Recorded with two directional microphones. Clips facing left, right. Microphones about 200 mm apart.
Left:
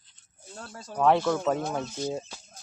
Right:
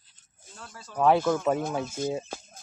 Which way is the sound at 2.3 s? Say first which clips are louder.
Right 8 dB; 50° right (ahead or behind).